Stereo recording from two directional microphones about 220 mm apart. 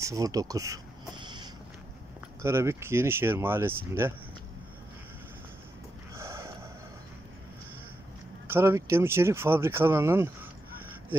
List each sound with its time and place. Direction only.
0.0 s a sound: 15° right (ahead or behind)
2.4 s speech: 10° right (ahead or behind)
6.1 s snort: 10° right (ahead or behind)
8.5 s speech: 10° right (ahead or behind)